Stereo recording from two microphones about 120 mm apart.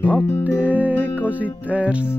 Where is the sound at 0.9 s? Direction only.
15° left (ahead or behind).